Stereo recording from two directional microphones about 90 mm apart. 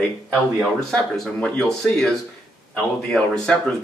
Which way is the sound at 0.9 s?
5° left (ahead or behind).